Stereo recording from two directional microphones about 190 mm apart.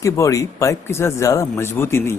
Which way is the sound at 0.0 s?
15° left (ahead or behind).